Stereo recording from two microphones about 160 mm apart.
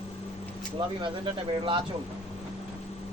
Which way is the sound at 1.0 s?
30° right (ahead or behind).